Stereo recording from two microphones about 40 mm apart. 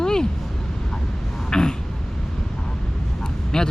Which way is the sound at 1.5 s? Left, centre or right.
Centre.